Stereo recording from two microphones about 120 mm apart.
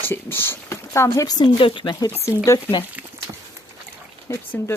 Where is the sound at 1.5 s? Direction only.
45° left (ahead or behind).